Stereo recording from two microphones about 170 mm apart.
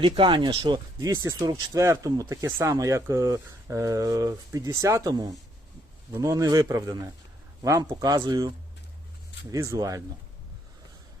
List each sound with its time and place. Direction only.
0.0 s speech: 30° right (ahead or behind)